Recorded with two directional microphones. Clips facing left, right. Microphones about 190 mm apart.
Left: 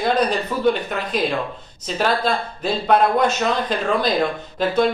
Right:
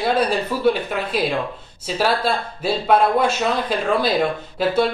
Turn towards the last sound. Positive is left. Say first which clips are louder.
# even
turn(degrees=-5)  # may be behind; listen again after turning